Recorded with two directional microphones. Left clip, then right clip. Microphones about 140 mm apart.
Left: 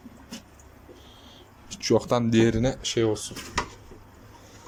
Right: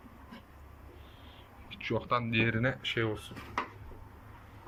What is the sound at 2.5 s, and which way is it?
Speech, 40° left (ahead or behind).